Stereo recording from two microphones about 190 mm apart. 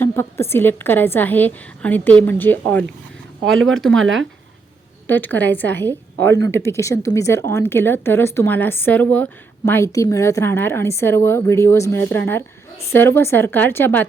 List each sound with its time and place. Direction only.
0.0 s a woman's voice: 10° left (ahead or behind)
3.5 s speech: 90° right
3.8 s speech: centre (ahead or behind)
4.0 s speech: 80° right
5.0 s a woman's voice: 10° left (ahead or behind)